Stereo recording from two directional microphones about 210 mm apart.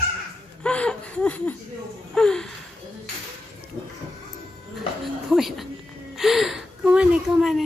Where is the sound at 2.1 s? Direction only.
5° left (ahead or behind).